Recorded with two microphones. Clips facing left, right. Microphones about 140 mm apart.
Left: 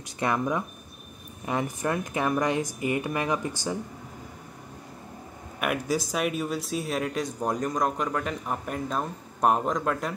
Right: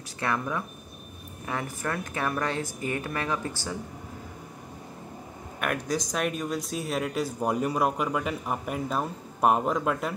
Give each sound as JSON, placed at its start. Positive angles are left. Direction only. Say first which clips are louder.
{"t": 0.2, "sound": "speech", "louder": "left 3 dB", "side_deg": 20}
{"t": 5.6, "sound": "speech", "louder": "left 2 dB", "side_deg": 5}